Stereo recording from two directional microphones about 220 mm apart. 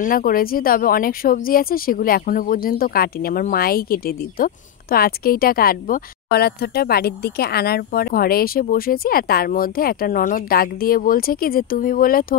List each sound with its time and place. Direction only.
0.0 s speech: 40° left (ahead or behind)